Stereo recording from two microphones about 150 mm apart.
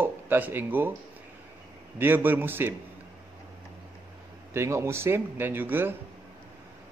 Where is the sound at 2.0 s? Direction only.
15° right (ahead or behind).